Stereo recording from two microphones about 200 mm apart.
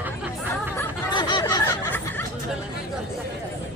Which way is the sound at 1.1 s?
20° left (ahead or behind).